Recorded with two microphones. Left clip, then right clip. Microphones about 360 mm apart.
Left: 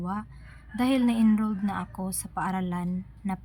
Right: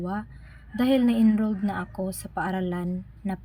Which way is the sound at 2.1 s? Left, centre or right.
Left.